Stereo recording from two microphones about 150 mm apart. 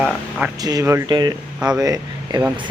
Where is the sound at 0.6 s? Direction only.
25° right (ahead or behind).